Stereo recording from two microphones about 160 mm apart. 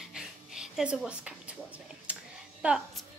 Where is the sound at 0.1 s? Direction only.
5° right (ahead or behind).